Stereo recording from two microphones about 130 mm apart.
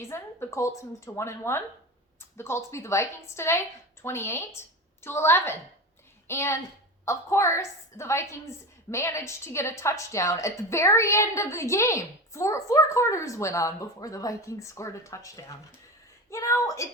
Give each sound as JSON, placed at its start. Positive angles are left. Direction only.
{"t": 0.0, "sound": "a woman's voice", "side_deg": 20}